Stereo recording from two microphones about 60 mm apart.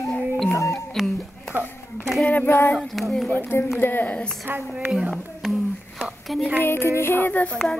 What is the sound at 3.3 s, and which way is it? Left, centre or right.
Music, left.